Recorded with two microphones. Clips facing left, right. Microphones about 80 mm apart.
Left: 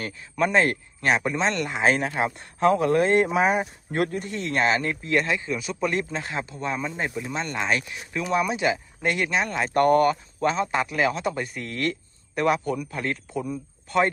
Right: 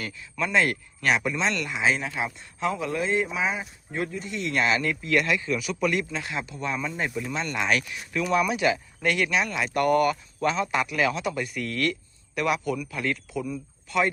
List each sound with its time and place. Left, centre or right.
0.3 s speech: left